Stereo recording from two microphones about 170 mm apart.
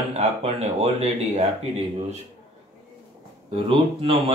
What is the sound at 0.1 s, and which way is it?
Speech, 40° right (ahead or behind).